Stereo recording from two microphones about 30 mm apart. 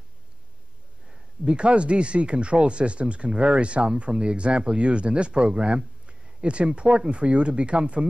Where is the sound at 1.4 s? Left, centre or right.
Right.